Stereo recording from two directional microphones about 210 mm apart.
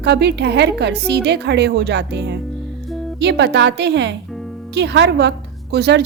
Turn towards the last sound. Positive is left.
turn(degrees=-50)  # may be behind; listen again after turning